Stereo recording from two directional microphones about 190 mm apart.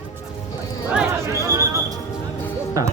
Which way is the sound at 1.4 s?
15° right (ahead or behind).